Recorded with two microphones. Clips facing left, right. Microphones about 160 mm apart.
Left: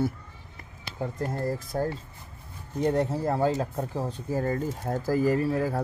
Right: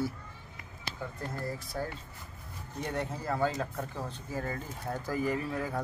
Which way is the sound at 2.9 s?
40° left (ahead or behind).